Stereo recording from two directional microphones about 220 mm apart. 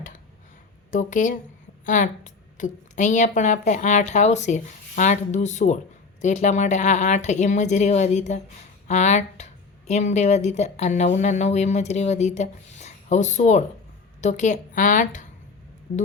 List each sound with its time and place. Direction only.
0.9 s speech: 35° left (ahead or behind)